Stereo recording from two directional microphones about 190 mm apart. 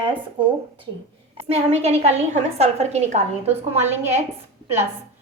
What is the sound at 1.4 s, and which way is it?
A woman's voice, 35° right (ahead or behind).